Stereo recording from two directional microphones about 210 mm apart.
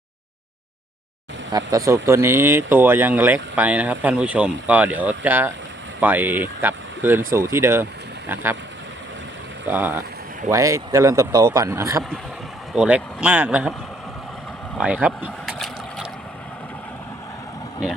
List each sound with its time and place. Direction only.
1.5 s speech: 15° right (ahead or behind)
9.6 s speech: 10° right (ahead or behind)
12.7 s speech: 5° right (ahead or behind)
14.8 s speech: 5° right (ahead or behind)